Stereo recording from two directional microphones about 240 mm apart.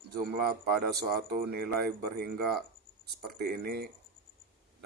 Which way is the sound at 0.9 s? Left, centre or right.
Right.